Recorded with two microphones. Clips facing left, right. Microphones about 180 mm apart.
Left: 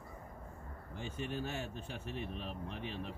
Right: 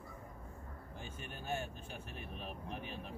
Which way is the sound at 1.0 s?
90° left.